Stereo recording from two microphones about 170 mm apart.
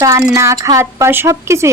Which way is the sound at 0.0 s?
20° right (ahead or behind).